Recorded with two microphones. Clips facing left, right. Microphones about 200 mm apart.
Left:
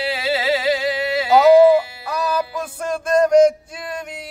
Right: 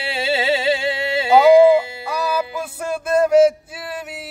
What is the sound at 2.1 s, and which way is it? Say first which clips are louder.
Music: even; 10° right (ahead or behind).